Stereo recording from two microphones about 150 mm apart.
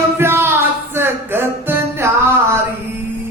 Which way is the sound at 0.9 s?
15° right (ahead or behind).